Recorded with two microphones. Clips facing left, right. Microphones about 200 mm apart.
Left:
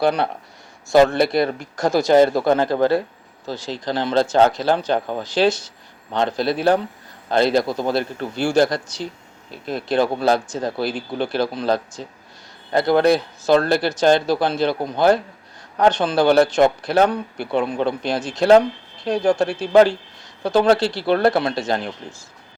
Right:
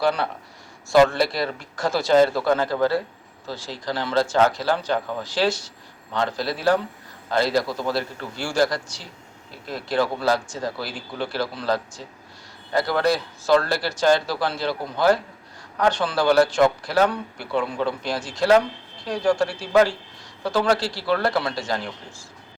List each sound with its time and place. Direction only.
0.0 s speech: 20° left (ahead or behind)
1.3 s speech: 55° left (ahead or behind)
1.8 s speech: 15° left (ahead or behind)